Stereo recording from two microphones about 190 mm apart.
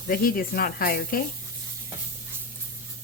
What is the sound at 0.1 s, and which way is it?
Speech, 50° left (ahead or behind).